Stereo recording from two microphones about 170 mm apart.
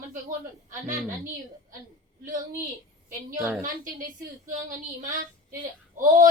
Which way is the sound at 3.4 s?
15° right (ahead or behind).